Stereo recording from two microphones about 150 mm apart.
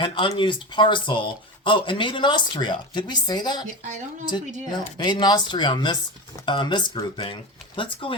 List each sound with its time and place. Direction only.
0.0 s speech: 35° left (ahead or behind)
3.7 s speech: 55° right (ahead or behind)
4.9 s speech: 30° left (ahead or behind)